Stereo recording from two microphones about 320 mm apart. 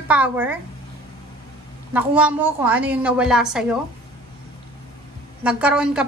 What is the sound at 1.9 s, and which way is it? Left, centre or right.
A woman's voice, centre.